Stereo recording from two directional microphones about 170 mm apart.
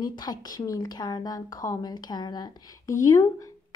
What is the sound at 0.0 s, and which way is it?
Speech, 25° left (ahead or behind).